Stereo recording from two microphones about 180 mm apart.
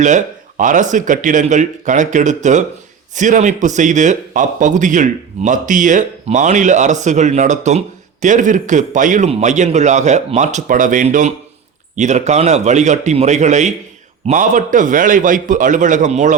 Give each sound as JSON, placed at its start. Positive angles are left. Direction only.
{"t": 0.0, "sound": "a man's voice", "side_deg": -40}